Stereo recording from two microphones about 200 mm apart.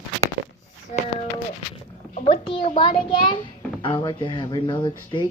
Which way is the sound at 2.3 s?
25° left (ahead or behind).